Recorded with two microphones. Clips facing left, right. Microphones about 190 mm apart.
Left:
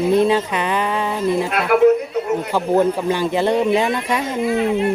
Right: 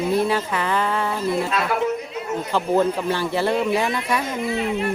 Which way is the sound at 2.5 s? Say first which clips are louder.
Left 2 dB; 15° left (ahead or behind).